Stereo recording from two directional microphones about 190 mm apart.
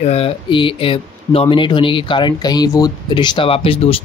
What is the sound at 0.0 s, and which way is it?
Speech, 30° left (ahead or behind).